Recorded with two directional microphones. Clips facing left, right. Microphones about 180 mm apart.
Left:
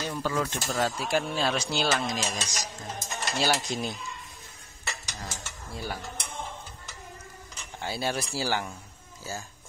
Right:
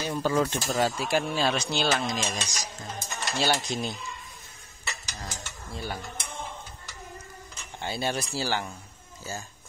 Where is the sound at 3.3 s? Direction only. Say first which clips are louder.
Right 1 dB; 5° left (ahead or behind).